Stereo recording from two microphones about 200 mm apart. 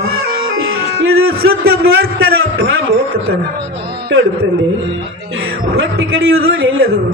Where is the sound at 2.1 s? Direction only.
90° right.